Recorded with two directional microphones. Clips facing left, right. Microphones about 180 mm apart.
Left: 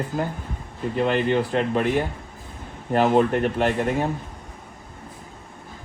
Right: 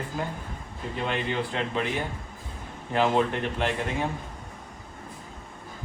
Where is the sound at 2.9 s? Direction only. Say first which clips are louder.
Left 5 dB; 45° left (ahead or behind).